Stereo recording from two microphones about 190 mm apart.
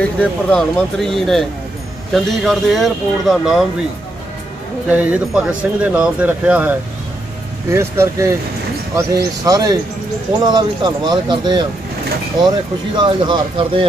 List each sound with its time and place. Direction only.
0.0 s speech: 5° left (ahead or behind)
4.8 s speech: 5° right (ahead or behind)
7.7 s speech: 15° right (ahead or behind)
12.9 s speech: 25° right (ahead or behind)